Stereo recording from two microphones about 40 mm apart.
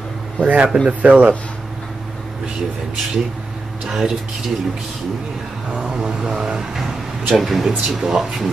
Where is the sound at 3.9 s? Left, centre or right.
Centre.